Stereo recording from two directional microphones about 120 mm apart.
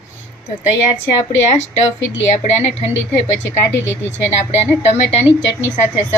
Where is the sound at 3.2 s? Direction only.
20° left (ahead or behind).